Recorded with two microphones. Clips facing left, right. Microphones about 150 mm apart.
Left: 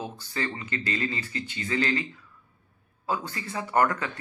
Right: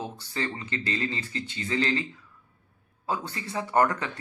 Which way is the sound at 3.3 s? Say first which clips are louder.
Right 1 dB; 25° right (ahead or behind).